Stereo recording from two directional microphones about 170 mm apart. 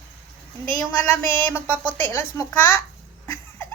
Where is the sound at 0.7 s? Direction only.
10° left (ahead or behind).